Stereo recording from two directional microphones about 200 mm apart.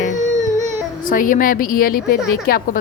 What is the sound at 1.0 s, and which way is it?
A woman's voice, 40° left (ahead or behind).